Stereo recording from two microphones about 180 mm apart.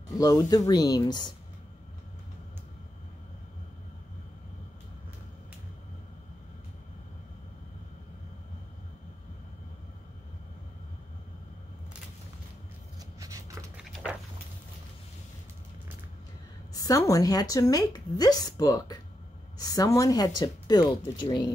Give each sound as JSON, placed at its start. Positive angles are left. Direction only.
{"t": 0.2, "sound": "speech", "side_deg": 20}
{"t": 13.2, "sound": "a sound", "side_deg": -20}
{"t": 16.7, "sound": "a woman's voice", "side_deg": 20}